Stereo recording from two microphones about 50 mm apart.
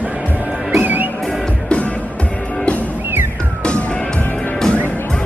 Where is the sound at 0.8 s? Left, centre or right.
Right.